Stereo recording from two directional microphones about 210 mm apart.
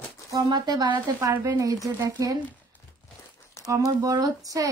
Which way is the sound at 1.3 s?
10° right (ahead or behind).